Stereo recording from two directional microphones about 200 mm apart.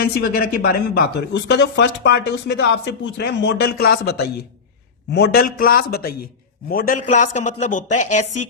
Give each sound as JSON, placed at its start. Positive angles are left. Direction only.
{"t": 0.0, "sound": "a man's voice", "side_deg": 50}